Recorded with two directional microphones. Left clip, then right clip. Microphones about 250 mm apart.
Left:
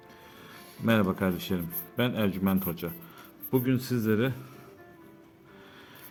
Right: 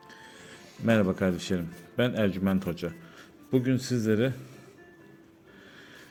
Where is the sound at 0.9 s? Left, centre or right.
Centre.